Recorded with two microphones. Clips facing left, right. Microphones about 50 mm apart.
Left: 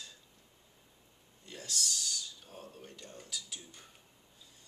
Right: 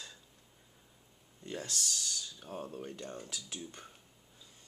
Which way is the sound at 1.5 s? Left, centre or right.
Right.